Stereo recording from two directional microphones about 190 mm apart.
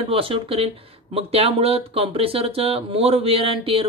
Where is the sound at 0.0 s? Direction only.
30° right (ahead or behind).